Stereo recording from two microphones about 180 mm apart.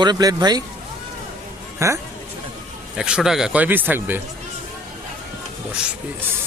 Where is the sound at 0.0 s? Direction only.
20° right (ahead or behind).